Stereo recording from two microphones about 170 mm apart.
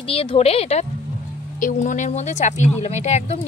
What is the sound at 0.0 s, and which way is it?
Speech, 35° left (ahead or behind).